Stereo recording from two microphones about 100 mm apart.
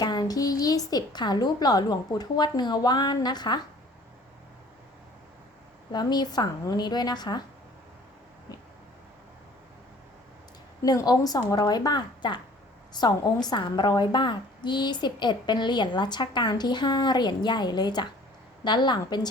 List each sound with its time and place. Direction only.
0.0 s a woman's voice: 45° left (ahead or behind)
5.9 s a woman's voice: 45° left (ahead or behind)
10.8 s a woman's voice: 40° left (ahead or behind)